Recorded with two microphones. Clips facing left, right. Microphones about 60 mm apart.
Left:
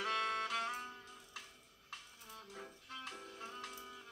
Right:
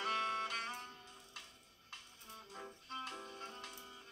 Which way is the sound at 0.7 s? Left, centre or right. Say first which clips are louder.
Left 3 dB; left.